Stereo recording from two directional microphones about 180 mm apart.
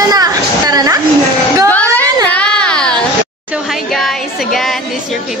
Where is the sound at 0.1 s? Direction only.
20° right (ahead or behind).